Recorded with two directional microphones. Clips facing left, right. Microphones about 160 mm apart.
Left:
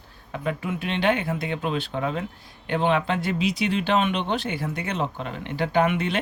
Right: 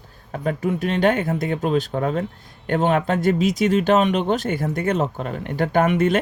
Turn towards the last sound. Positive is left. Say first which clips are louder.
# right 5 dB
turn(degrees=-45)  # may be behind; listen again after turning